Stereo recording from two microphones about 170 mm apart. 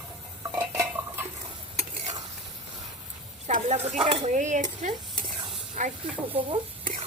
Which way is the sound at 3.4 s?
45° right (ahead or behind).